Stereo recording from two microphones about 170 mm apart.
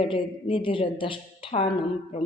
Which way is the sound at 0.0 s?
30° left (ahead or behind).